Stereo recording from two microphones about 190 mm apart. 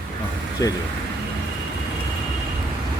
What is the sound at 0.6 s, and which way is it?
Speech, 20° left (ahead or behind).